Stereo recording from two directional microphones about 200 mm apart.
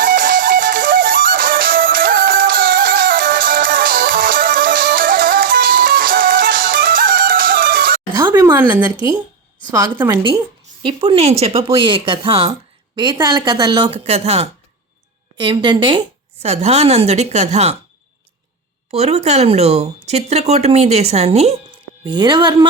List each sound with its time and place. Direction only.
0.0 s music: 45° right (ahead or behind)
8.2 s a woman's voice: 20° right (ahead or behind)
10.8 s speech: 25° right (ahead or behind)
18.9 s speech: 30° right (ahead or behind)